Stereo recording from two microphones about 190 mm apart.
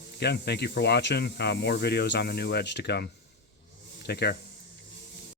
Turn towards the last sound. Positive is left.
turn(degrees=60)  # may be behind; listen again after turning